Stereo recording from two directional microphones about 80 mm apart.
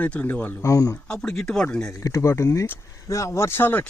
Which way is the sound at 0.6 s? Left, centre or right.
Left.